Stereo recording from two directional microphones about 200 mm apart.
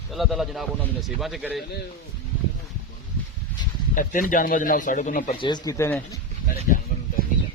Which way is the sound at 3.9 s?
40° left (ahead or behind).